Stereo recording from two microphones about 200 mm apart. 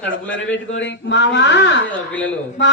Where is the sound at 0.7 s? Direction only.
65° left (ahead or behind).